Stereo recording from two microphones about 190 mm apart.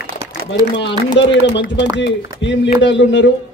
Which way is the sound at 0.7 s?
70° left (ahead or behind).